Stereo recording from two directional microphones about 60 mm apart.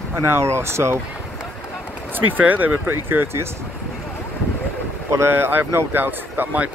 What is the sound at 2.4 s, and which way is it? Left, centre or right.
Speech, right.